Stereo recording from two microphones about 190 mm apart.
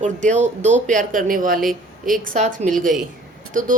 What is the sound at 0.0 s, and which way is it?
A woman's voice, 40° right (ahead or behind).